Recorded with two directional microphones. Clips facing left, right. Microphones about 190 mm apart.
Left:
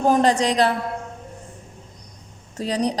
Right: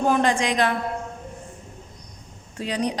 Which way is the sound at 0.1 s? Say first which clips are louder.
Left 6 dB; 40° left (ahead or behind).